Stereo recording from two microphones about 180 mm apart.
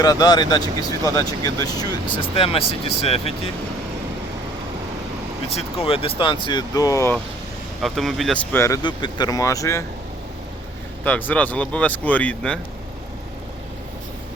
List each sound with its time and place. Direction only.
0.0 s speech: 20° left (ahead or behind)
2.3 s speech: 30° left (ahead or behind)
5.5 s speech: 30° left (ahead or behind); by 7.2 s 15° left (ahead or behind)
7.8 s speech: centre (ahead or behind)
8.5 s speech: 15° left (ahead or behind)
11.0 s speech: 10° left (ahead or behind)